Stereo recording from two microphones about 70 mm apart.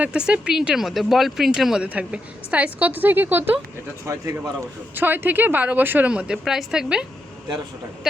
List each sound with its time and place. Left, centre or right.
0.0 s speech: centre
1.9 s a woman's voice: centre
4.9 s a woman's voice: right
6.1 s speech: centre